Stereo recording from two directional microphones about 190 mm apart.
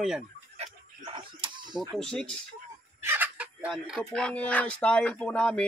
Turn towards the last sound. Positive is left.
turn(degrees=5)  # may be behind; listen again after turning